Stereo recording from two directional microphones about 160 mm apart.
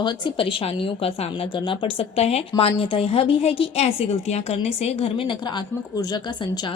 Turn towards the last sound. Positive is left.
turn(degrees=25)  # may be behind; listen again after turning